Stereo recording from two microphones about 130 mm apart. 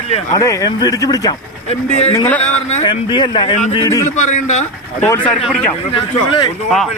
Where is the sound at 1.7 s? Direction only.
55° left (ahead or behind).